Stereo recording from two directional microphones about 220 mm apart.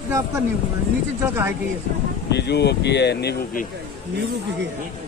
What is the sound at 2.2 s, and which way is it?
Speech, 50° left (ahead or behind).